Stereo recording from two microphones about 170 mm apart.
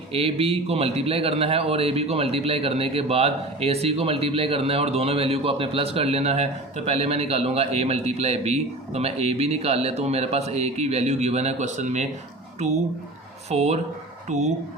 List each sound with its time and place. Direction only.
0.1 s a man's voice: 35° right (ahead or behind)
13.5 s a man's voice: 40° right (ahead or behind)